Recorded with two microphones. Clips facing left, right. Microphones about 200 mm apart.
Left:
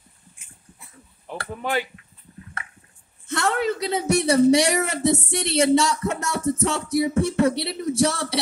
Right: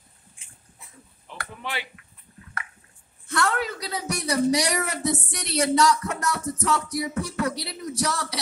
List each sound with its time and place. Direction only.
1.5 s speech: 45° left (ahead or behind)
3.3 s speech: 25° left (ahead or behind)